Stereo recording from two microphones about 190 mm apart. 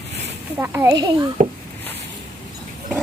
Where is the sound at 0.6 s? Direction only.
15° right (ahead or behind).